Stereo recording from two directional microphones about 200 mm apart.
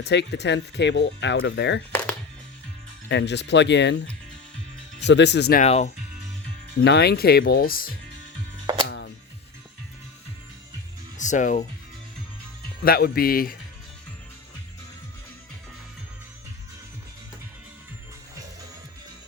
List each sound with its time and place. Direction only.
0.0 s speech: 60° left (ahead or behind)
3.1 s speech: 60° left (ahead or behind)
5.6 s speech: 30° left (ahead or behind)
6.7 s speech: 55° left (ahead or behind)
8.9 s music: 60° left (ahead or behind)
11.2 s speech: 40° left (ahead or behind)
12.8 s speech: 50° left (ahead or behind)